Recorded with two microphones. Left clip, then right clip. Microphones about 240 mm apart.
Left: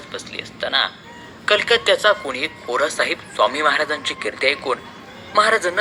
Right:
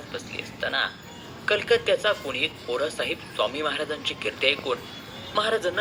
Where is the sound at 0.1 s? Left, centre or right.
Centre.